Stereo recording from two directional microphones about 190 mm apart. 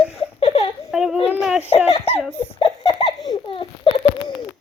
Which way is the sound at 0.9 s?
Centre (ahead or behind).